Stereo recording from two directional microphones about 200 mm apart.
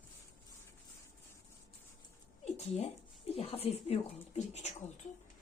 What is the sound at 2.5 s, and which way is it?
Speech, 30° left (ahead or behind).